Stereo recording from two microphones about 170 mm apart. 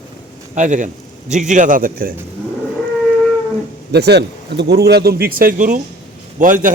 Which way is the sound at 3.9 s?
75° right (ahead or behind).